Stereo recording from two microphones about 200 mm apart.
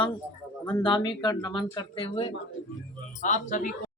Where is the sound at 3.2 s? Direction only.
40° left (ahead or behind).